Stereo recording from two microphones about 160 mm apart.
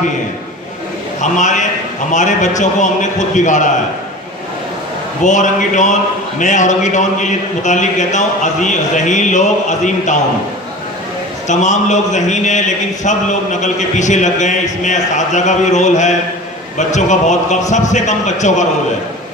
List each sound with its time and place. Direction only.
1.2 s a man's voice: 50° left (ahead or behind)
5.2 s a man's voice: 50° left (ahead or behind)
11.4 s a man's voice: 50° left (ahead or behind)